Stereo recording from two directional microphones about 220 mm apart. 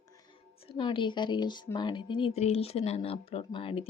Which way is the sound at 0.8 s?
20° left (ahead or behind).